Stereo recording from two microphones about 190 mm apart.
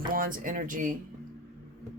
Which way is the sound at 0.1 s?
45° right (ahead or behind).